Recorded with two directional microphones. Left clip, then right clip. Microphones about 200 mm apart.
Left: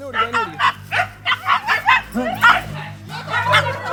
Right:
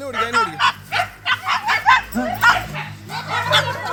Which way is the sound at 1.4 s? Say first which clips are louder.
Left 4 dB; 30° left (ahead or behind).